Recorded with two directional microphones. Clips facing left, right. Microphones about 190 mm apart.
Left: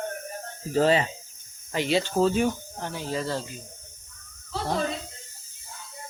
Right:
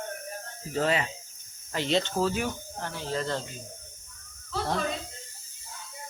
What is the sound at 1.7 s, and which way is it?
Speech, 10° left (ahead or behind).